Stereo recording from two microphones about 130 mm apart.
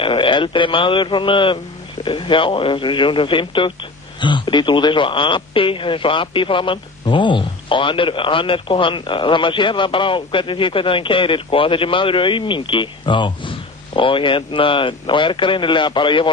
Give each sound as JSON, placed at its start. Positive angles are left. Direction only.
{"t": 0.0, "sound": "a man's voice", "side_deg": 40}